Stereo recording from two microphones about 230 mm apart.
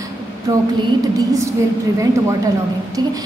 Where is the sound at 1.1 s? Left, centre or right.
Centre.